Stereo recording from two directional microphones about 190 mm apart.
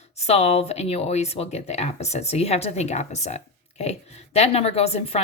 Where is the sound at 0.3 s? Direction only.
35° left (ahead or behind).